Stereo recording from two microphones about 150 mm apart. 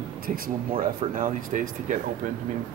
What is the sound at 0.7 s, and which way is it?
Speech, 70° right (ahead or behind).